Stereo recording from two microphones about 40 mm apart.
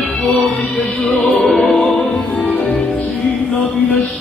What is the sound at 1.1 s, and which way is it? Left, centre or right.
Music, left.